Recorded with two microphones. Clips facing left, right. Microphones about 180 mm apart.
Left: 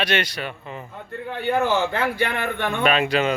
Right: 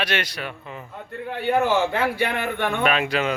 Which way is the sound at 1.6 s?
10° right (ahead or behind).